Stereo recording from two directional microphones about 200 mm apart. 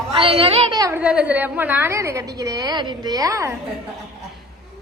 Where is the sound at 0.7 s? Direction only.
15° right (ahead or behind).